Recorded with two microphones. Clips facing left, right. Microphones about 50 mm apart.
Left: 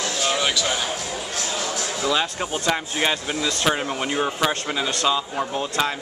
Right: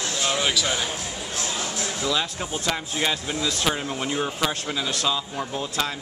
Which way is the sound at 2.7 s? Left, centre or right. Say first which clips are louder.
Left 3 dB; left.